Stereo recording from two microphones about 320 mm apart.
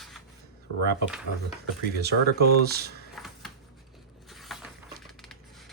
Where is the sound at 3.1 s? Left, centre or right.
Centre.